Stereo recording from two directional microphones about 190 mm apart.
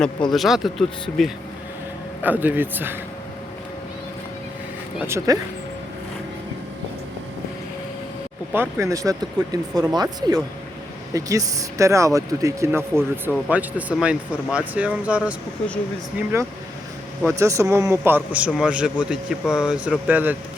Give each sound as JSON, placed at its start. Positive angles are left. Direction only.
{"t": 0.3, "sound": "a man's voice", "side_deg": 0}
{"t": 4.9, "sound": "a man's voice", "side_deg": -15}
{"t": 8.8, "sound": "a man's voice", "side_deg": -15}